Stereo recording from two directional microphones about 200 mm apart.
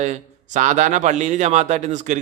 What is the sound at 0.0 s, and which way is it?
A man's voice, 35° right (ahead or behind).